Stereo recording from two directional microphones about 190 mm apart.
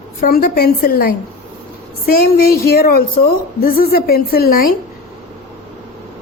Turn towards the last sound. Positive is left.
turn(degrees=50)  # may be behind; listen again after turning